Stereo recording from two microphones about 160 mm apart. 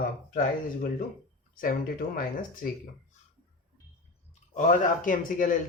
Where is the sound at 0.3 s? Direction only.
65° left (ahead or behind).